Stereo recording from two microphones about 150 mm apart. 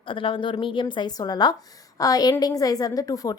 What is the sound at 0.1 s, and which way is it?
A woman's voice, 35° left (ahead or behind).